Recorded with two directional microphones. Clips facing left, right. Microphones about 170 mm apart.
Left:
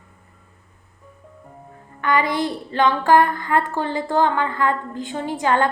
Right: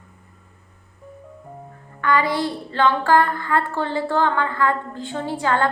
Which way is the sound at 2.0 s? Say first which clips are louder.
Even; 20° left (ahead or behind).